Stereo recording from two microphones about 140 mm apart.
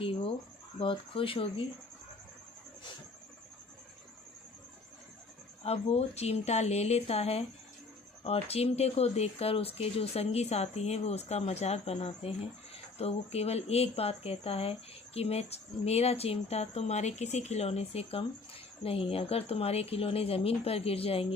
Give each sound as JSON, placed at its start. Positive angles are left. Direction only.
{"t": 0.8, "sound": "speech", "side_deg": 40}
{"t": 5.6, "sound": "speech", "side_deg": 50}